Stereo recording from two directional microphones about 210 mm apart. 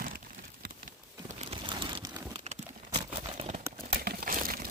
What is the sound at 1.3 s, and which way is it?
Crumpling, 30° right (ahead or behind).